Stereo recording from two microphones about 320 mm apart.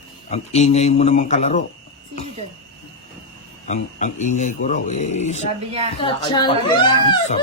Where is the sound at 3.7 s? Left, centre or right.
Left.